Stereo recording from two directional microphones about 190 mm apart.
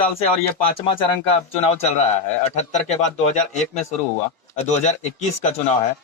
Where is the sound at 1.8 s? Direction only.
35° left (ahead or behind).